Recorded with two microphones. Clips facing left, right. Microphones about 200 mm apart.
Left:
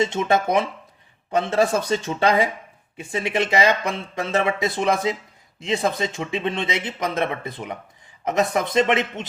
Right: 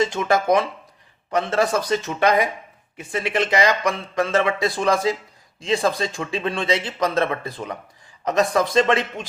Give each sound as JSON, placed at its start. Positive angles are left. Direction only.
{"t": 0.0, "sound": "speech", "side_deg": 25}